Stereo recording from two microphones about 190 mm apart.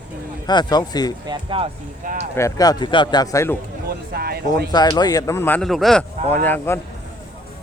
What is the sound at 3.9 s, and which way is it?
Speech, 55° right (ahead or behind).